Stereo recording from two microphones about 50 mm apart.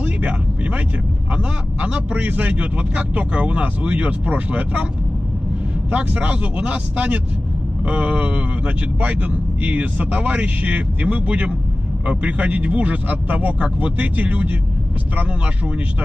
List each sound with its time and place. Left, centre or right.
0.0 s a sound: right
1.3 s speech: right
5.9 s speech: right